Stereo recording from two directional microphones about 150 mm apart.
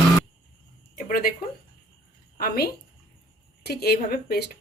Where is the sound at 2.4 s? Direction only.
90° left.